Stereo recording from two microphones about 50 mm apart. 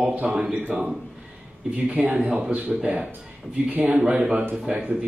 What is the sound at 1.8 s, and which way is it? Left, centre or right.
Speech, right.